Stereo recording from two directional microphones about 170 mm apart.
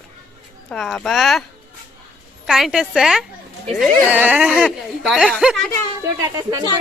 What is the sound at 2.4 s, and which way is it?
A woman's voice, centre (ahead or behind).